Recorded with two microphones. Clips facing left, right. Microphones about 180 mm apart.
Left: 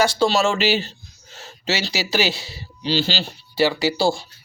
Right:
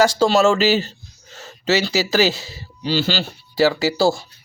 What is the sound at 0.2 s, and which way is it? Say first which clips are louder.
Speech: right 4 dB; 45° right (ahead or behind).